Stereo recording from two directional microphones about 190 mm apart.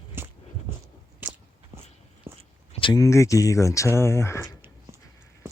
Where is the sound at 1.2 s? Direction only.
10° right (ahead or behind).